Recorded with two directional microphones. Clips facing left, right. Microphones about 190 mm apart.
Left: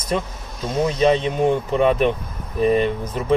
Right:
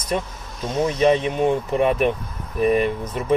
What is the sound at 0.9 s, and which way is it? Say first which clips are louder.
Speech: even; 25° left (ahead or behind).